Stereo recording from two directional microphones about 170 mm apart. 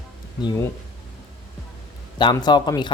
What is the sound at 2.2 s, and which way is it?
Speech, 25° left (ahead or behind).